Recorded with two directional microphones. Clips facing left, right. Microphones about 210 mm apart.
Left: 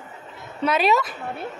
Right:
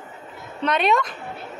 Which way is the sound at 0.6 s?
5° left (ahead or behind).